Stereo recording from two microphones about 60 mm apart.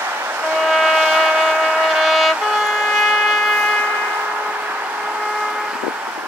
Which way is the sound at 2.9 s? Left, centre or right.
Centre.